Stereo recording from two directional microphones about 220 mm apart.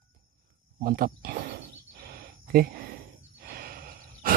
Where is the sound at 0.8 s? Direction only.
40° right (ahead or behind).